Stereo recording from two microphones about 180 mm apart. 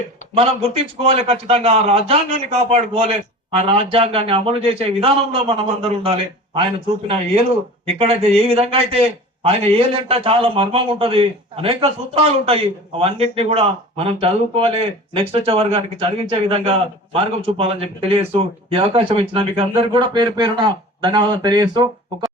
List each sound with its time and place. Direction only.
0.3 s a man's voice: 30° right (ahead or behind)
7.9 s a man's voice: 30° right (ahead or behind)